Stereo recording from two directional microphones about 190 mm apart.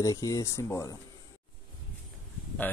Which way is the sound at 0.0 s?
15° left (ahead or behind).